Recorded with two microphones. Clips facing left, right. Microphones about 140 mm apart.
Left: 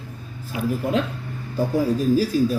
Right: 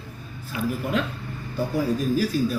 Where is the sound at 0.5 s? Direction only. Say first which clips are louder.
Left 2 dB; 15° left (ahead or behind).